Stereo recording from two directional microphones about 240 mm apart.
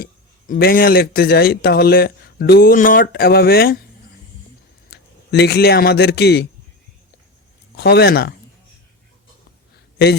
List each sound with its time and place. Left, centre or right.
0.0 s speech: left
4.9 s a man's voice: left
7.8 s speech: left